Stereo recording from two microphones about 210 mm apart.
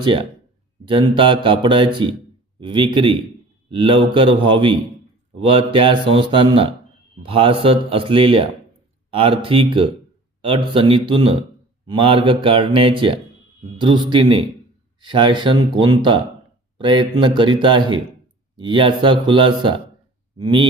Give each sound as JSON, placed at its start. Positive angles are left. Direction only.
{"t": 0.0, "sound": "speech", "side_deg": -25}